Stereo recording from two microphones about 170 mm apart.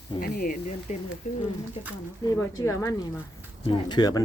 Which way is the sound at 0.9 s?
40° left (ahead or behind).